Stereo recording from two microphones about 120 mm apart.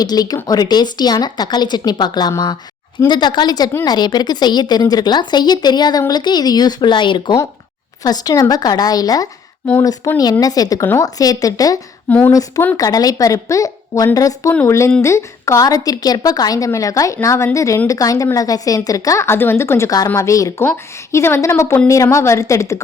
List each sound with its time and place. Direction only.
0.0 s speech: 35° left (ahead or behind)
12.0 s a sound: 15° left (ahead or behind)
12.3 s a woman's voice: 30° left (ahead or behind)